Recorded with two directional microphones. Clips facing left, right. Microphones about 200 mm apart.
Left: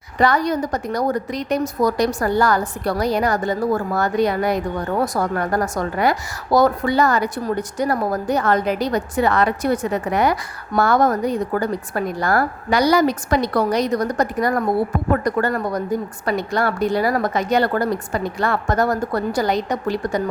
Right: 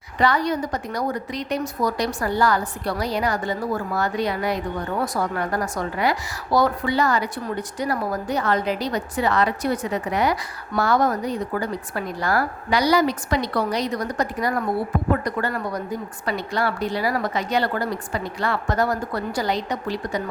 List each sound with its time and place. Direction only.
0.2 s a woman's voice: 45° left (ahead or behind)